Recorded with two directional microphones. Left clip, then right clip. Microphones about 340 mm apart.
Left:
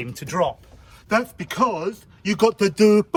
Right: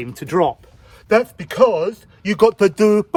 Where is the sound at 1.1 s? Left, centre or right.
Right.